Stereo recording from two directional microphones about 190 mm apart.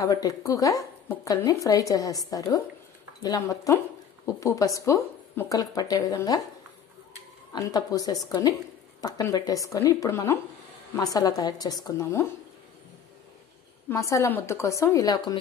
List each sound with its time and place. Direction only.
0.0 s a woman's voice: 20° left (ahead or behind)
7.5 s a woman's voice: 20° left (ahead or behind)
13.8 s speech: 15° left (ahead or behind)